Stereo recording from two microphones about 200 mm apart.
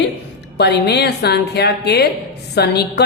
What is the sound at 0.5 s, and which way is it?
A woman's voice, 55° left (ahead or behind).